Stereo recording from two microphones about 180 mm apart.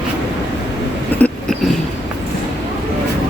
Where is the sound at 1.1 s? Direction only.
10° left (ahead or behind).